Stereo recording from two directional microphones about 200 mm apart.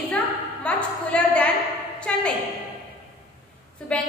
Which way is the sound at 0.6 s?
5° left (ahead or behind).